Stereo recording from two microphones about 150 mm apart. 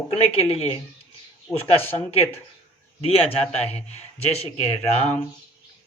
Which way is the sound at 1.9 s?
40° left (ahead or behind).